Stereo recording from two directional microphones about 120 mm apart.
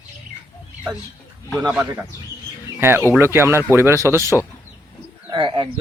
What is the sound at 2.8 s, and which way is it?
Speech, 20° right (ahead or behind).